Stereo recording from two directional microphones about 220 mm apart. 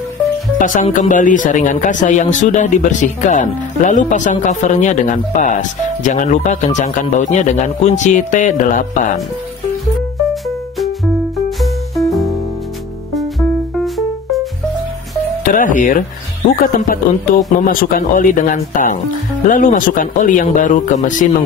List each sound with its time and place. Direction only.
0.6 s speech: 35° left (ahead or behind)
13.8 s music: centre (ahead or behind)
15.4 s speech: 35° left (ahead or behind)